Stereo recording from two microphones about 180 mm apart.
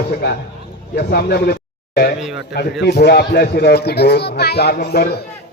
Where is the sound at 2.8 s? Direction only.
65° left (ahead or behind).